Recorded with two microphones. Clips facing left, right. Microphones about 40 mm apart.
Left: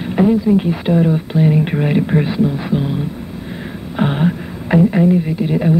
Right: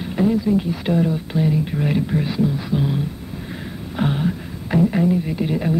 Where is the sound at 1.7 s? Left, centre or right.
Left.